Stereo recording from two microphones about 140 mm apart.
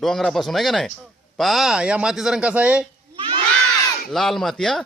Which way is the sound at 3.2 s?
40° right (ahead or behind).